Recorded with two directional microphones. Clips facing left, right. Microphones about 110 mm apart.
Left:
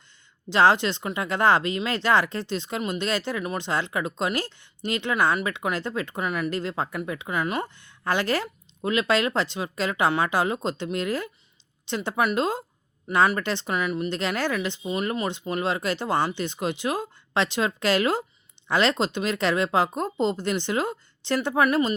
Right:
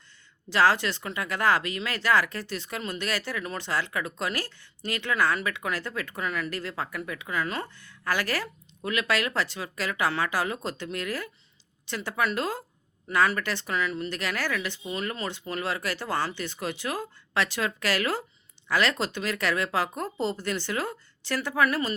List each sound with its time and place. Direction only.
0.5 s speech: 25° left (ahead or behind)